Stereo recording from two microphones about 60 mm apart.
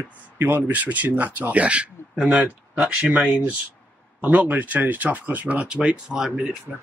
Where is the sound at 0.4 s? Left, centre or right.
Right; by 6.3 s centre.